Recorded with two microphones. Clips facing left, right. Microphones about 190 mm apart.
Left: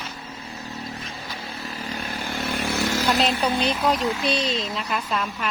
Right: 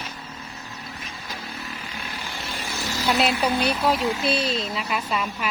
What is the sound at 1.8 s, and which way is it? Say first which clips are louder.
Motorcycle: left 5 dB; 40° left (ahead or behind).